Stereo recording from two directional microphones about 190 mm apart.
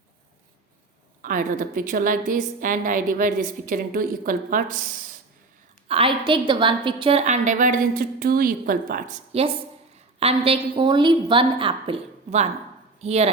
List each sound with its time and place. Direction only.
1.2 s a woman's voice: 45° right (ahead or behind)
5.9 s a woman's voice: 30° right (ahead or behind); by 9.1 s 50° right (ahead or behind)
9.3 s a woman's voice: 30° right (ahead or behind)